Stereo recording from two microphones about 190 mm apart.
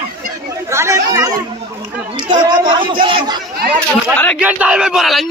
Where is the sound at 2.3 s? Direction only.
25° right (ahead or behind).